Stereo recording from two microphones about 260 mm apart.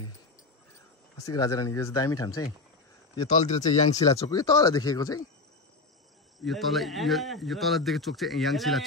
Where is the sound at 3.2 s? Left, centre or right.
Left.